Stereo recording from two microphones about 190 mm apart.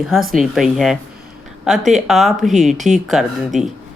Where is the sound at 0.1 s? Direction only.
Centre (ahead or behind).